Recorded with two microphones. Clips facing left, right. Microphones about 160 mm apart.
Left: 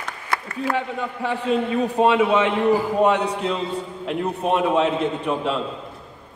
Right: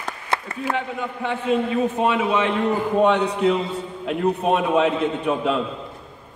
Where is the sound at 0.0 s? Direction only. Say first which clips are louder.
Right 1 dB; 30° right (ahead or behind).